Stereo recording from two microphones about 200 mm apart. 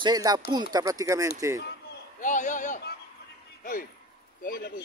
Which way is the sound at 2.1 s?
40° left (ahead or behind).